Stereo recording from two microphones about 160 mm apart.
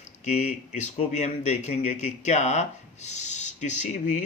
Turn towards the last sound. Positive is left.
turn(degrees=50)  # may be behind; listen again after turning